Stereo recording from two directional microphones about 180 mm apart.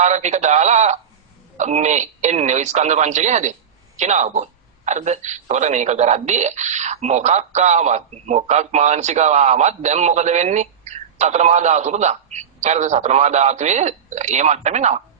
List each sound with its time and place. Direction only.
0.0 s speech: 40° right (ahead or behind)